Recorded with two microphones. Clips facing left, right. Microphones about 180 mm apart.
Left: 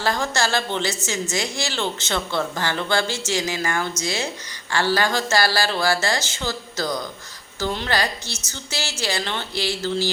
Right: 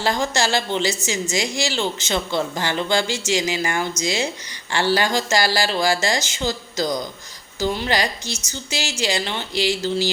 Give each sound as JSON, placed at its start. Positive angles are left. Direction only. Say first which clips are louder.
{"t": 0.0, "sound": "speech", "louder": "right 2 dB", "side_deg": -15}